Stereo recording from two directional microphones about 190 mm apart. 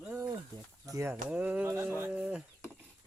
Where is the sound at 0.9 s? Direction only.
15° right (ahead or behind).